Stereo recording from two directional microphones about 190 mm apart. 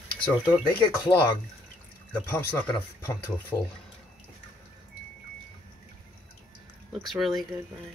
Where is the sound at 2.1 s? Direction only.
10° left (ahead or behind).